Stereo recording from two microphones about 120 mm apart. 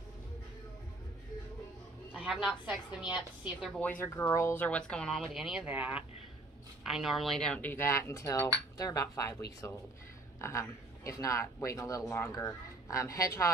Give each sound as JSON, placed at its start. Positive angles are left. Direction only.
{"t": 2.1, "sound": "a woman's voice", "side_deg": -5}
{"t": 4.0, "sound": "speech", "side_deg": 20}
{"t": 4.6, "sound": "speech", "side_deg": 10}
{"t": 5.2, "sound": "speech", "side_deg": -5}
{"t": 6.9, "sound": "speech", "side_deg": 0}